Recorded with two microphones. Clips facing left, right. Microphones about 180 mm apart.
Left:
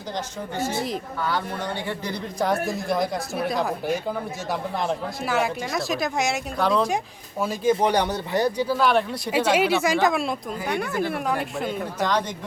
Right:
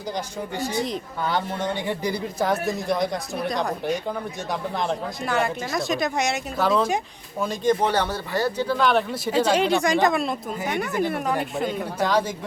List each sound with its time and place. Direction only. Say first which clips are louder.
1.3 s speech: right 3 dB; 20° right (ahead or behind)
2.4 s speech: even; centre (ahead or behind)